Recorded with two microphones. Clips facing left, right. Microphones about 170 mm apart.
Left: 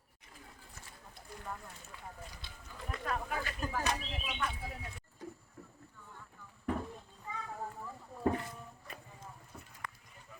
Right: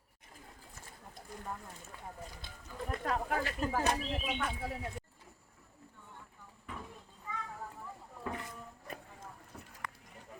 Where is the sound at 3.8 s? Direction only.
50° right (ahead or behind).